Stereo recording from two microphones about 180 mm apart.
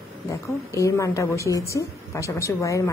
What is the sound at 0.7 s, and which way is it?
A woman's voice, 15° left (ahead or behind).